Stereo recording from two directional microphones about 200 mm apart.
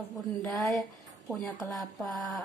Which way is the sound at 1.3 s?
15° left (ahead or behind).